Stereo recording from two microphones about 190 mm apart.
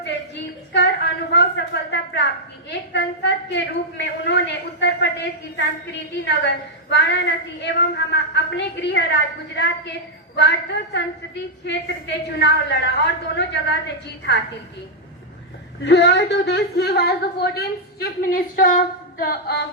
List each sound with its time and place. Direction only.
1.3 s a woman's voice: 65° left (ahead or behind)
15.8 s a woman's voice: 65° left (ahead or behind)